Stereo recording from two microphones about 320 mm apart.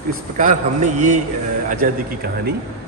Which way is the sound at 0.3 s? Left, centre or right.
Right.